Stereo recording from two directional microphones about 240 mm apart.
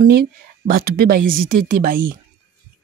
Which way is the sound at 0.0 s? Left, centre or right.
Right.